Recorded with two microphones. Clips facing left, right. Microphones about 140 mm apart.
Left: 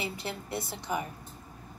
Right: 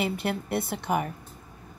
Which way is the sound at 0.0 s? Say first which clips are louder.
Right 8 dB; 60° right (ahead or behind).